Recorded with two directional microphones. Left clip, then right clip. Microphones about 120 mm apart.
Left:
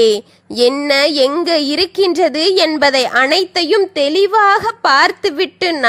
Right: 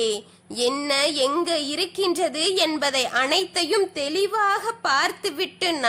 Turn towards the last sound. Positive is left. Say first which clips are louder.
# left 9 dB
turn(degrees=50)  # may be behind; listen again after turning